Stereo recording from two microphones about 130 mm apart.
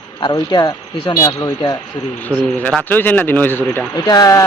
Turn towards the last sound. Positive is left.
turn(degrees=30)  # may be behind; listen again after turning